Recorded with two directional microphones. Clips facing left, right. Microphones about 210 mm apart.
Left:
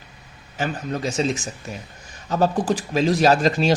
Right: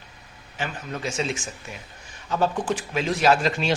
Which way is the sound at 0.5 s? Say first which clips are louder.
Left 6 dB; 40° left (ahead or behind).